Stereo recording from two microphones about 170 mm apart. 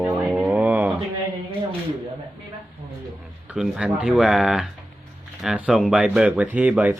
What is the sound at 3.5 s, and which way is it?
Speech, 5° right (ahead or behind).